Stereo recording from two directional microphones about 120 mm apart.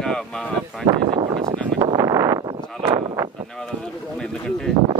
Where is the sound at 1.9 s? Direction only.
25° right (ahead or behind).